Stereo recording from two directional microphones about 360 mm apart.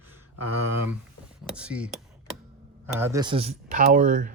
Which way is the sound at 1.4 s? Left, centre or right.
Centre.